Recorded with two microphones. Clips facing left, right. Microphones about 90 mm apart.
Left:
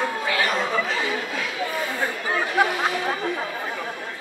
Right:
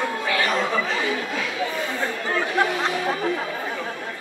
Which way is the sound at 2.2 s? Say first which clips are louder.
Left 1 dB; 15° left (ahead or behind).